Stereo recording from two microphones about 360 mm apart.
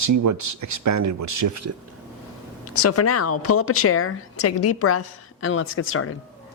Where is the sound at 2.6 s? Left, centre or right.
Left.